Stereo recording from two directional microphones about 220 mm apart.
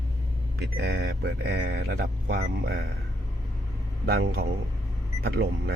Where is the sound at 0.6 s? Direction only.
50° right (ahead or behind).